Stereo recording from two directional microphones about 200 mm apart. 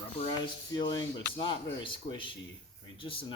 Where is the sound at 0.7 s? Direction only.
20° left (ahead or behind).